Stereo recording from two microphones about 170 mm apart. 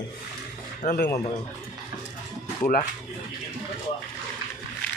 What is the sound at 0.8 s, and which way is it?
Speech, 60° left (ahead or behind).